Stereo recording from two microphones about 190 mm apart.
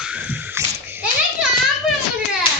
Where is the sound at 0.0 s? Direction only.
5° right (ahead or behind).